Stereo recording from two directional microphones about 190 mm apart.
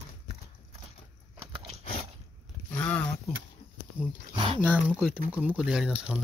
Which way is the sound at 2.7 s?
10° left (ahead or behind).